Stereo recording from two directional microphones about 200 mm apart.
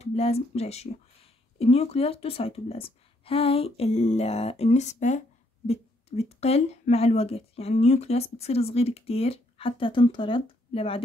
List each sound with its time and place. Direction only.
0.0 s a woman's voice: 30° left (ahead or behind)